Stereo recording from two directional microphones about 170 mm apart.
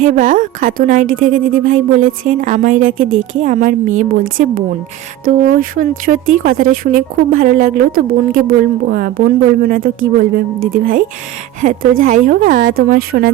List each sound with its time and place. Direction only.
0.0 s speech: 50° right (ahead or behind)